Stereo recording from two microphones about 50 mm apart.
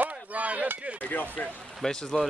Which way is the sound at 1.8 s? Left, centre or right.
Centre.